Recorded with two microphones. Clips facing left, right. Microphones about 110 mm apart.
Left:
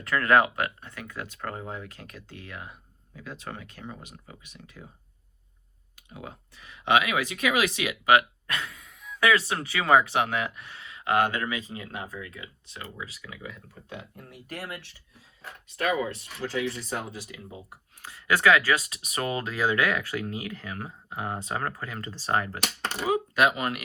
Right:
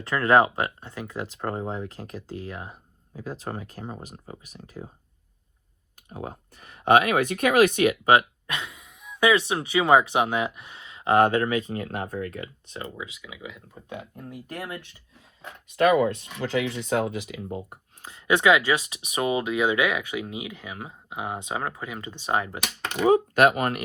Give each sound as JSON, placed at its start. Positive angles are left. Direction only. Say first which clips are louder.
{"t": 0.0, "sound": "speech", "louder": "right 2 dB", "side_deg": -30}
{"t": 6.1, "sound": "speech", "louder": "right 6 dB", "side_deg": -40}
{"t": 8.0, "sound": "speech", "louder": "right 2 dB", "side_deg": -25}
{"t": 13.1, "sound": "speech", "louder": "right 1 dB", "side_deg": -5}
{"t": 13.7, "sound": "speech", "louder": "right 4 dB", "side_deg": -20}
{"t": 15.7, "sound": "speech", "louder": "right 8 dB", "side_deg": -65}
{"t": 18.0, "sound": "speech", "louder": "right 2 dB", "side_deg": -25}
{"t": 23.3, "sound": "speech", "louder": "right 4 dB", "side_deg": -55}